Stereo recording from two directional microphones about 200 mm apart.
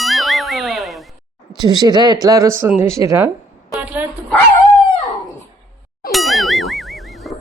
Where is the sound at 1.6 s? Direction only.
20° right (ahead or behind).